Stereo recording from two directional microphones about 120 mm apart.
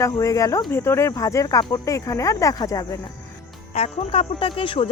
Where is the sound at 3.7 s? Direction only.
60° left (ahead or behind).